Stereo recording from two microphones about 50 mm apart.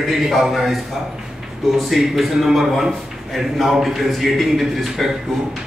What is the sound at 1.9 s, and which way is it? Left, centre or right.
A man's voice, centre.